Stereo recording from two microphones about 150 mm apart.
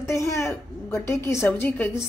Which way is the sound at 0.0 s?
20° left (ahead or behind).